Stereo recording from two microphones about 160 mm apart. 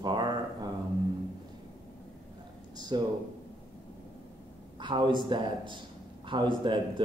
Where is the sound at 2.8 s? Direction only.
25° right (ahead or behind).